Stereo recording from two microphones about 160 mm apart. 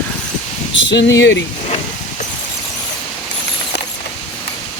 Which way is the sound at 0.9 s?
90° left.